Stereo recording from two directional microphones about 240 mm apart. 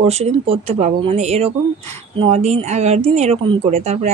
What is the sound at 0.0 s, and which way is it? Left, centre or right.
Speech, right.